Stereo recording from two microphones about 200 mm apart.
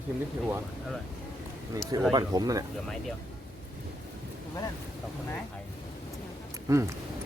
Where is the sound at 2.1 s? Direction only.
20° right (ahead or behind).